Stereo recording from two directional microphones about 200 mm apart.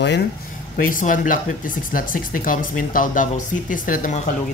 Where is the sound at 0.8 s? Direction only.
45° left (ahead or behind).